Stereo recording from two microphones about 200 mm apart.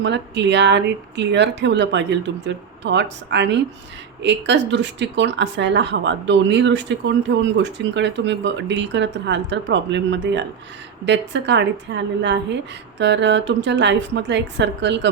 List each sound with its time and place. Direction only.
0.0 s speech: 60° right (ahead or behind)